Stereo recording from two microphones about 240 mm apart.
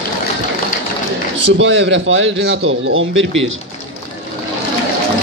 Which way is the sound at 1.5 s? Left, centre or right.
Right.